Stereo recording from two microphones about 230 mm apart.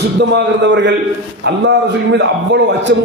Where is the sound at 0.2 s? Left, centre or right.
Right.